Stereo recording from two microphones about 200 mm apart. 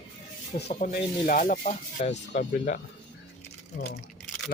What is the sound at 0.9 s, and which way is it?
Speech, 40° left (ahead or behind).